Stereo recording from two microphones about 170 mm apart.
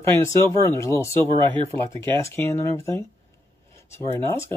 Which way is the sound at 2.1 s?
15° left (ahead or behind).